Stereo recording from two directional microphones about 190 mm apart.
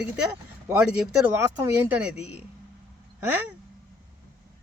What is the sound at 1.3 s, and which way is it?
Speech, 10° right (ahead or behind).